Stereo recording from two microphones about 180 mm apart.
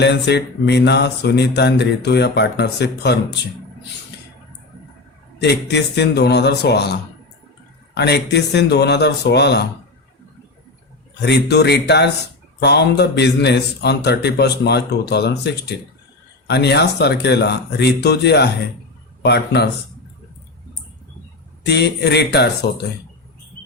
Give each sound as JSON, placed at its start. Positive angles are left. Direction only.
{"t": 0.0, "sound": "a man's voice", "side_deg": 70}
{"t": 5.4, "sound": "a man's voice", "side_deg": 70}
{"t": 11.3, "sound": "a man's voice", "side_deg": 70}
{"t": 21.7, "sound": "a man's voice", "side_deg": 70}